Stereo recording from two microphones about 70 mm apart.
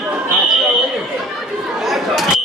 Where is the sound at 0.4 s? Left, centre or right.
Centre.